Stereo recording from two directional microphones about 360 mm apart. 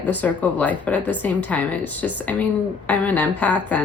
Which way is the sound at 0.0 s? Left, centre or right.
Centre.